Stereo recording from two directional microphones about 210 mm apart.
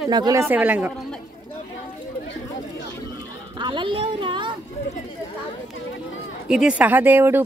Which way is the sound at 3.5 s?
20° right (ahead or behind).